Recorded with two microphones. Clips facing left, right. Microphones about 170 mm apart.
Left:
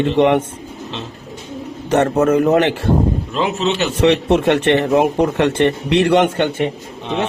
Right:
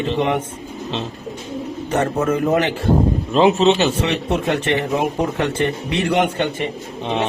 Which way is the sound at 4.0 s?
75° left (ahead or behind).